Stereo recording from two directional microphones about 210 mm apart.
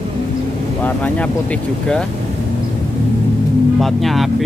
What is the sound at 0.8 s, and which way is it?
Speech, 5° left (ahead or behind).